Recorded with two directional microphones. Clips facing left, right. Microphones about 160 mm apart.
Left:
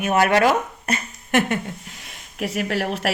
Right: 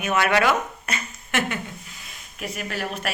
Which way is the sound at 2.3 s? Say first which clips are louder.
Left 7 dB; 75° left (ahead or behind).